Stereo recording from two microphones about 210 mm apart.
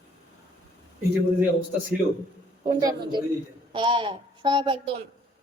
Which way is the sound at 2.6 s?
20° right (ahead or behind).